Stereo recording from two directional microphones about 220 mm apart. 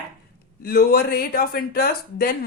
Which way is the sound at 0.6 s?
45° left (ahead or behind).